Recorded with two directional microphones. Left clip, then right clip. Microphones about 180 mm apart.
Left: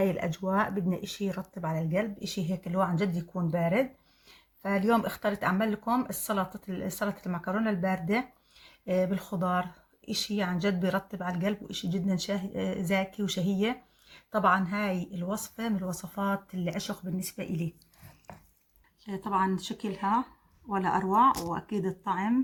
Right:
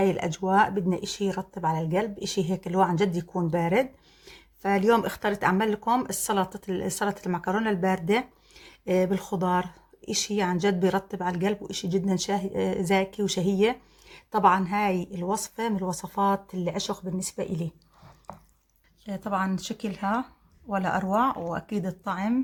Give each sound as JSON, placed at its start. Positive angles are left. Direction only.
{"t": 0.0, "sound": "speech", "side_deg": -30}
{"t": 19.0, "sound": "speech", "side_deg": -30}